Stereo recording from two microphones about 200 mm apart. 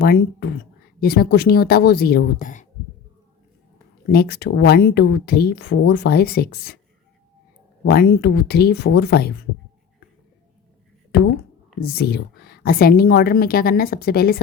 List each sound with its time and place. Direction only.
0.0 s speech: 50° left (ahead or behind)
4.1 s speech: 50° left (ahead or behind)
7.9 s speech: 50° left (ahead or behind)
11.8 s speech: 50° left (ahead or behind)